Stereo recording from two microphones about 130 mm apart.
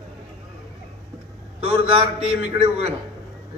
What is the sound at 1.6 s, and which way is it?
A man's voice, 45° right (ahead or behind).